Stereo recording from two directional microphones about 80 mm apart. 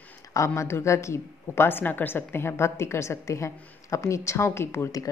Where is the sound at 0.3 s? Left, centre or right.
Left.